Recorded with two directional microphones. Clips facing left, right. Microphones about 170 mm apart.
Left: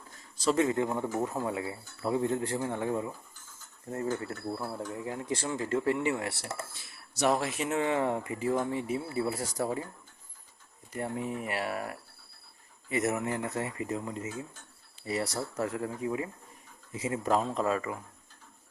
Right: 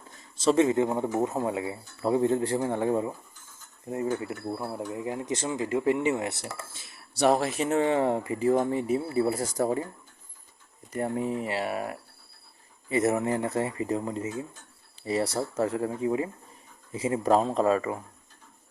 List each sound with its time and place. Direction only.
0.3 s speech: 25° right (ahead or behind)
3.8 s speech: 15° right (ahead or behind); by 9.8 s 45° right (ahead or behind)
10.9 s speech: 45° right (ahead or behind)
11.3 s speech: 25° right (ahead or behind)